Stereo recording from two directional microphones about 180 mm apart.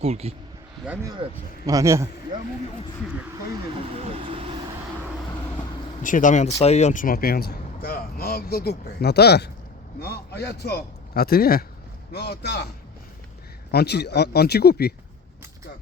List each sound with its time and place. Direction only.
0.0 s speech: 35° right (ahead or behind)
1.6 s speech: 15° right (ahead or behind)
3.8 s speech: 35° right (ahead or behind)
6.0 s a man's voice: 45° left (ahead or behind); by 12.6 s 65° left (ahead or behind)
13.7 s a man's voice: 65° left (ahead or behind)